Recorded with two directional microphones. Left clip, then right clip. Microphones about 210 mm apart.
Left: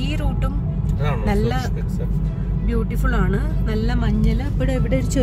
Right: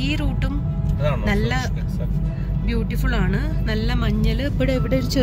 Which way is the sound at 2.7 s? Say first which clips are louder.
Left 2 dB; 5° left (ahead or behind).